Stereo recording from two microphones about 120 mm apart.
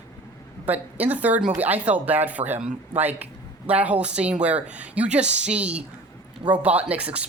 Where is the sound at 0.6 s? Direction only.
15° right (ahead or behind).